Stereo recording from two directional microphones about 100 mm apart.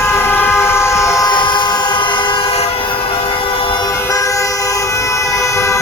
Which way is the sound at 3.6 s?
55° left (ahead or behind).